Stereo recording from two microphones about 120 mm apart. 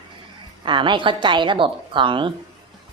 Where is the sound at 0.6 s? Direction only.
40° right (ahead or behind).